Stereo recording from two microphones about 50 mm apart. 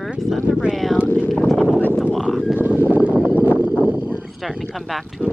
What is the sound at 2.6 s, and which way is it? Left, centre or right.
Horse, right.